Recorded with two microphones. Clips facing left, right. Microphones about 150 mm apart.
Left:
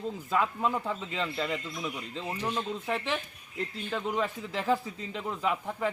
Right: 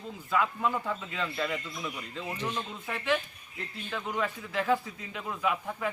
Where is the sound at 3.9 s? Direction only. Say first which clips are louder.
Left 1 dB; 30° left (ahead or behind).